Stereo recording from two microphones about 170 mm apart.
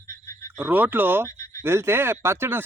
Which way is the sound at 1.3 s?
15° left (ahead or behind).